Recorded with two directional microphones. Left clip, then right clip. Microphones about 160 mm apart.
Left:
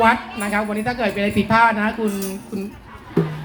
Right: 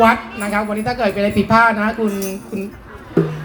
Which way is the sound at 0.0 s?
25° left (ahead or behind).